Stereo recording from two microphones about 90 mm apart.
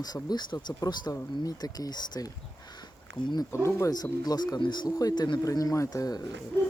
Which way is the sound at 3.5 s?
30° left (ahead or behind).